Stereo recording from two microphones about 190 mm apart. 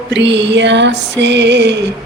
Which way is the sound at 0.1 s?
65° right (ahead or behind).